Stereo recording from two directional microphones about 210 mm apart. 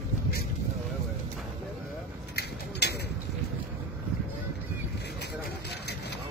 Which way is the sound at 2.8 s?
50° left (ahead or behind).